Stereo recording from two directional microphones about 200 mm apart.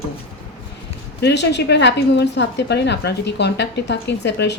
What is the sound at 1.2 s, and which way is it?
A woman's voice, 60° left (ahead or behind).